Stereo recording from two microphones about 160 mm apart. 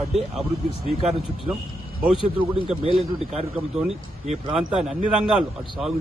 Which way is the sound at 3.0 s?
40° right (ahead or behind).